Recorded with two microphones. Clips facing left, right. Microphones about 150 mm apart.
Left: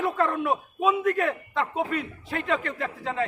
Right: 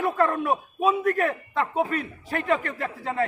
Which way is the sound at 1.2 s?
45° right (ahead or behind).